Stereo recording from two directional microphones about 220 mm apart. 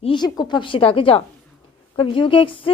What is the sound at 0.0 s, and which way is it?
A woman's voice, 20° left (ahead or behind).